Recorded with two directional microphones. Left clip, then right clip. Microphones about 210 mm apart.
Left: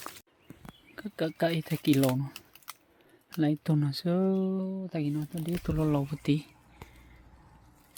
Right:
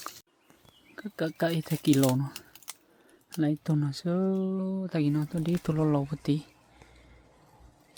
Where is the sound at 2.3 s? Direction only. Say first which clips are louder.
Right 1 dB; 40° right (ahead or behind).